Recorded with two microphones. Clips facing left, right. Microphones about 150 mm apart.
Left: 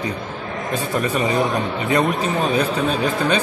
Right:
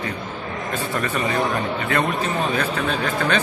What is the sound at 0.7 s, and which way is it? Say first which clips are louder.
Speech: left 4 dB; 20° left (ahead or behind).